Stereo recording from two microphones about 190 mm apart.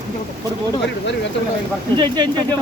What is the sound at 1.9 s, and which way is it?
Speech, 20° right (ahead or behind).